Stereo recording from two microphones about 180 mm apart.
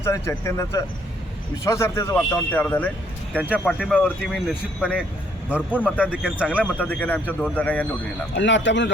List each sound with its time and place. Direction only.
0.0 s a man's voice: 15° left (ahead or behind); by 6.7 s 5° right (ahead or behind)
6.7 s a man's voice: 10° left (ahead or behind)
8.4 s speech: 90° left